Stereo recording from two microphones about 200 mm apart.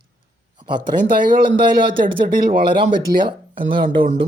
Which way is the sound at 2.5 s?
25° right (ahead or behind).